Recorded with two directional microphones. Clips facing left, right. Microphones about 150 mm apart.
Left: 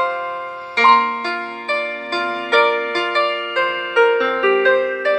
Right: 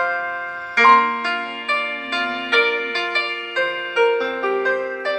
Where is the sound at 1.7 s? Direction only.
40° left (ahead or behind); by 5.1 s 80° left.